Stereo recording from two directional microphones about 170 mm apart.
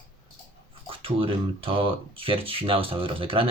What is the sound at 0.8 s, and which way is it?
Speech, 30° right (ahead or behind).